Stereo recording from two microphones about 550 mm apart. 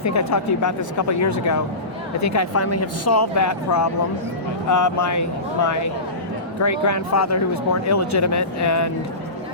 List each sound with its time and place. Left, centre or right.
0.0 s speech: left